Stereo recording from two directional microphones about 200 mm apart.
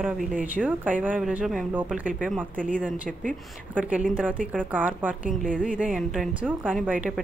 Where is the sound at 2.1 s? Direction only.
5° left (ahead or behind).